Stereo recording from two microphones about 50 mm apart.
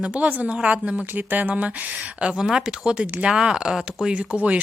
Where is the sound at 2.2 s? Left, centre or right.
Centre.